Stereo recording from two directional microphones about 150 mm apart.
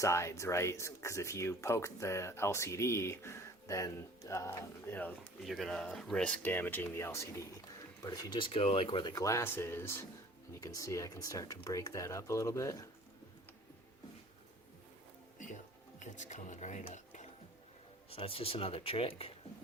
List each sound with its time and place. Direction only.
0.0 s speech: 20° left (ahead or behind)
5.5 s speech: centre (ahead or behind); by 12.9 s 20° left (ahead or behind)
16.0 s speech: 55° left (ahead or behind)
16.9 s a sound: 50° left (ahead or behind)
18.1 s speech: 40° left (ahead or behind)